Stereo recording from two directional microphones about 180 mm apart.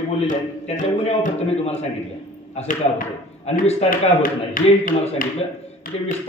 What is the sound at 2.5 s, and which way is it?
Speech, 50° left (ahead or behind).